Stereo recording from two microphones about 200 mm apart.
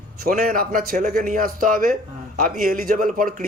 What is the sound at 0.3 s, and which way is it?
Speech, 45° right (ahead or behind).